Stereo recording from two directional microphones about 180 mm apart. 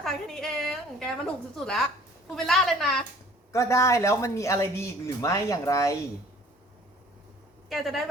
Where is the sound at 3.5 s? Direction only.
15° left (ahead or behind).